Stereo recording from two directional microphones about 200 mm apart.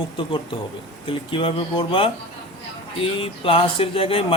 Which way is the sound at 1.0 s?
25° left (ahead or behind).